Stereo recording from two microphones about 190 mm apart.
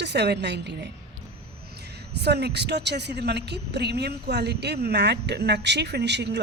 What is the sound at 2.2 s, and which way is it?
A woman's voice, 60° right (ahead or behind).